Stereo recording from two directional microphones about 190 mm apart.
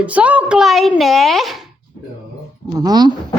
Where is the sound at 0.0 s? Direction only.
5° right (ahead or behind).